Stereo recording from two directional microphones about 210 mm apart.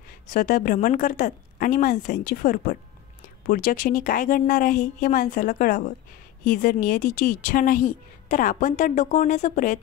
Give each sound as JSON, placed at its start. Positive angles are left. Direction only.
{"t": 0.3, "sound": "a woman's voice", "side_deg": 40}